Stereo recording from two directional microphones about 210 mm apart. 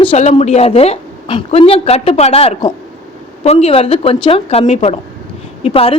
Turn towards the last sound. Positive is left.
turn(degrees=25)  # may be behind; listen again after turning